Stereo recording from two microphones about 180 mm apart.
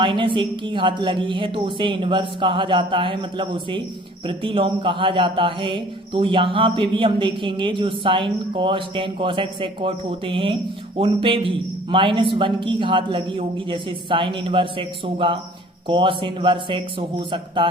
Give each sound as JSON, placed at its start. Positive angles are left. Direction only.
{"t": 0.0, "sound": "a man's voice", "side_deg": -25}